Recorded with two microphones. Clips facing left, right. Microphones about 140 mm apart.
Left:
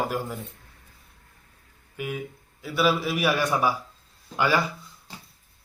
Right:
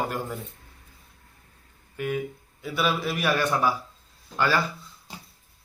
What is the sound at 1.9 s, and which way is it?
A man's voice, 5° left (ahead or behind).